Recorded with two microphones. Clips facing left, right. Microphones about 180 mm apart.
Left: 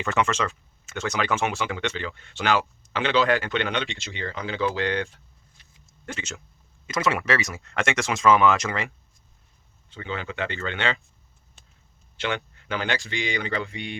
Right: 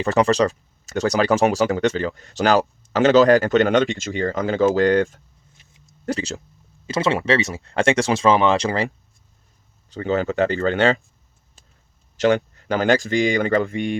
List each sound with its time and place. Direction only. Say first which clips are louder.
0.0 s speech: right 8 dB; 35° right (ahead or behind)
9.9 s speech: right 12 dB; 40° right (ahead or behind)
12.1 s speech: right 11 dB; 40° right (ahead or behind)